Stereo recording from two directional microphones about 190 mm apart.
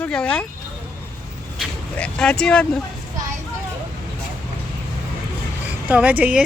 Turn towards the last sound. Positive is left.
turn(degrees=-10)  # may be behind; listen again after turning